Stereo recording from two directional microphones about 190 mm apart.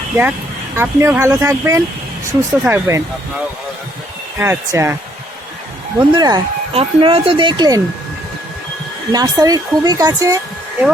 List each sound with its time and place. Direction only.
0.8 s speech: 15° right (ahead or behind)
4.4 s speech: 15° right (ahead or behind)
6.0 s speech: 20° right (ahead or behind)
9.1 s speech: 20° right (ahead or behind)